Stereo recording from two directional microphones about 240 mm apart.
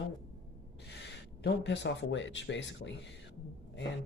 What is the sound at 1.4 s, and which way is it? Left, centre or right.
Speech, left.